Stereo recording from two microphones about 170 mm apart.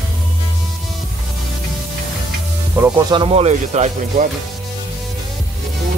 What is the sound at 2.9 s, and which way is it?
Speech, 30° right (ahead or behind).